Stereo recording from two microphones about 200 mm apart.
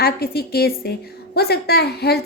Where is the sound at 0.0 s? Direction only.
50° left (ahead or behind).